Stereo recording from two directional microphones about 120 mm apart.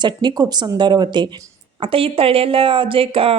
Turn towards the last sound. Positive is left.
turn(degrees=-50)  # may be behind; listen again after turning